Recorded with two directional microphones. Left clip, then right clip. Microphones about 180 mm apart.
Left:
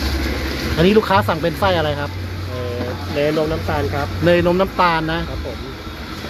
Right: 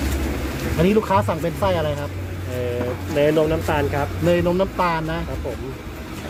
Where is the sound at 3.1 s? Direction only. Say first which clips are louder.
Right 1 dB; 30° right (ahead or behind).